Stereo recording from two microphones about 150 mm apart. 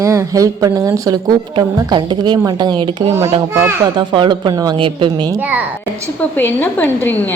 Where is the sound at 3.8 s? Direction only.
30° right (ahead or behind).